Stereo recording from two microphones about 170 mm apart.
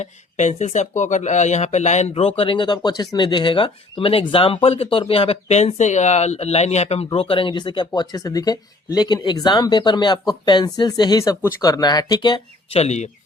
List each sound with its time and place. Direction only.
0.0 s speech: 45° left (ahead or behind); by 12.8 s 25° left (ahead or behind)
12.8 s speech: 40° left (ahead or behind)